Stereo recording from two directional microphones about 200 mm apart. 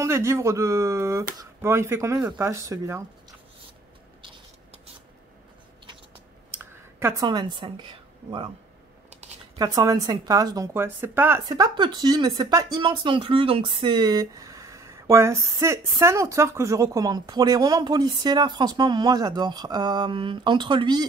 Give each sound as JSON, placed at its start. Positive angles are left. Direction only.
{"t": 0.0, "sound": "speech", "side_deg": -15}
{"t": 6.5, "sound": "a sound", "side_deg": -10}
{"t": 9.6, "sound": "speech", "side_deg": -20}